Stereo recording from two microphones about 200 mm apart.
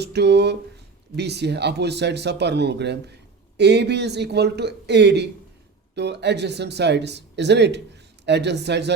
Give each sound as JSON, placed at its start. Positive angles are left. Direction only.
{"t": 0.0, "sound": "speech", "side_deg": -55}